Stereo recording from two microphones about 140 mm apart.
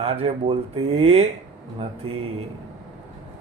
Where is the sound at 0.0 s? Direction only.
45° right (ahead or behind).